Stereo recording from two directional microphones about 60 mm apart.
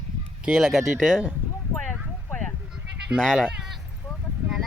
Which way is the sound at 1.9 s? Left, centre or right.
Centre.